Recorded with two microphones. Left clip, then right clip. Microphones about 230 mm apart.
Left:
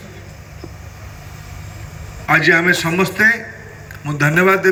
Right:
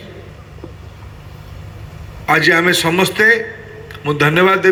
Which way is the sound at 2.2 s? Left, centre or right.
Right.